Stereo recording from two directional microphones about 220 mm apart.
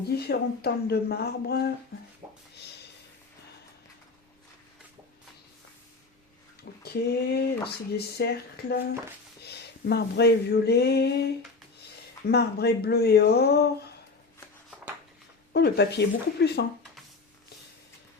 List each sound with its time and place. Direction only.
0.1 s speech: 45° left (ahead or behind)
2.2 s a sound: 20° right (ahead or behind)
6.6 s speech: 45° left (ahead or behind)
9.4 s a sound: 50° left (ahead or behind)
12.3 s speech: 50° left (ahead or behind)
15.5 s speech: 50° left (ahead or behind)